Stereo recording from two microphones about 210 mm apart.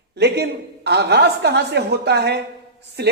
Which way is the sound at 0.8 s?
50° right (ahead or behind).